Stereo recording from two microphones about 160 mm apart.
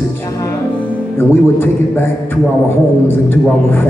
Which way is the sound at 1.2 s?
15° left (ahead or behind).